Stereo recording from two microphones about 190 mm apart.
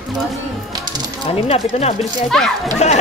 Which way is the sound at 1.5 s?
35° left (ahead or behind).